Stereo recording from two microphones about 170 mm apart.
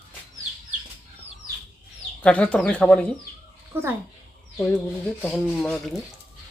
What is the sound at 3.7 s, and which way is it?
Speech, 15° right (ahead or behind).